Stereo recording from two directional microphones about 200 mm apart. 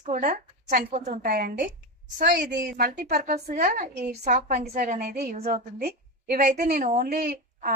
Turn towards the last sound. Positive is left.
turn(degrees=-45)  # may be behind; listen again after turning